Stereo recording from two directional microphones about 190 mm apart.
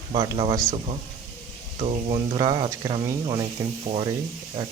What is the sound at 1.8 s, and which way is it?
Speech, 30° right (ahead or behind).